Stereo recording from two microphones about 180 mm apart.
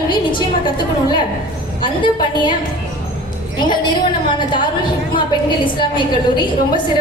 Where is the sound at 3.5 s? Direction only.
25° left (ahead or behind).